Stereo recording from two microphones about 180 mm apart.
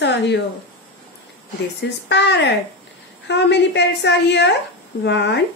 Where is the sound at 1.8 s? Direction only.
70° left (ahead or behind).